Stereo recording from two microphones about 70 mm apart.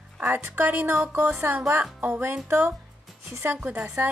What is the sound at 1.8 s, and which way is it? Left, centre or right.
Music, right.